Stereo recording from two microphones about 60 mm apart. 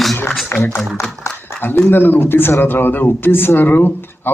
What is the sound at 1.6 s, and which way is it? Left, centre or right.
A man's voice, left.